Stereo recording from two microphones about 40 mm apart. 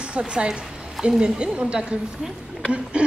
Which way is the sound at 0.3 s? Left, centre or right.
Right.